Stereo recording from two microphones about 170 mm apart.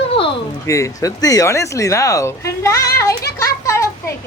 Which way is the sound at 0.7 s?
20° left (ahead or behind).